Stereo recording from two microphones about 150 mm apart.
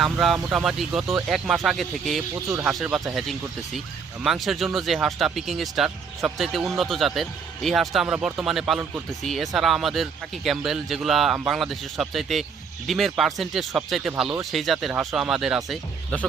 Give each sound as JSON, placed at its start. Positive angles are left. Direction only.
{"t": 0.0, "sound": "speech", "side_deg": 0}
{"t": 2.3, "sound": "speech", "side_deg": -20}
{"t": 2.6, "sound": "speech", "side_deg": -5}